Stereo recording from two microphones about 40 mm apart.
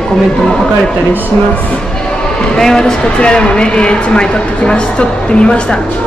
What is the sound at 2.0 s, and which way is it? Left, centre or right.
Speech, left.